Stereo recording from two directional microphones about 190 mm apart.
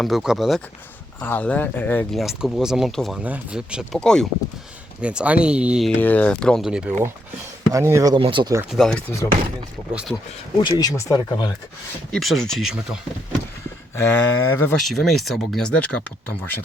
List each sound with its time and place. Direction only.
0.0 s speech: centre (ahead or behind)
6.0 s speech: 10° left (ahead or behind)
7.7 s speech: 15° right (ahead or behind)
8.7 s speech: 5° left (ahead or behind)
10.6 s speech: 20° left (ahead or behind)
12.1 s speech: centre (ahead or behind)
13.9 s speech: 10° left (ahead or behind)
14.8 s speech: centre (ahead or behind)